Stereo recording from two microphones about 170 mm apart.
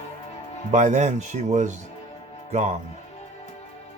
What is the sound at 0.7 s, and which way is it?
Speech, 45° right (ahead or behind).